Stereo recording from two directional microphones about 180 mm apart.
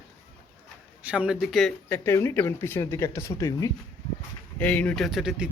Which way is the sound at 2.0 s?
15° left (ahead or behind).